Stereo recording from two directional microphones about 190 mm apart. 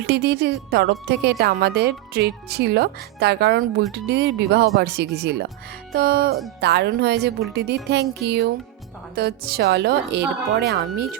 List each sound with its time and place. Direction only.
0.0 s a woman's voice: 60° right (ahead or behind)